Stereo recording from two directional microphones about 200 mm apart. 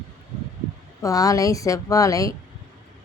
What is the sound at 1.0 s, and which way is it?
A woman's voice, 15° left (ahead or behind).